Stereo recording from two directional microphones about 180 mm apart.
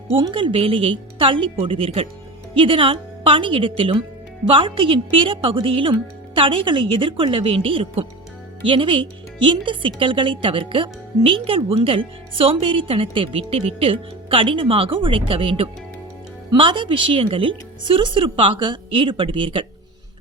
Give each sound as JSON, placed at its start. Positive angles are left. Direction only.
{"t": 0.2, "sound": "a woman's voice", "side_deg": -25}